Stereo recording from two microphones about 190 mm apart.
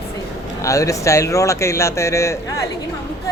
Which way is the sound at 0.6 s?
15° left (ahead or behind).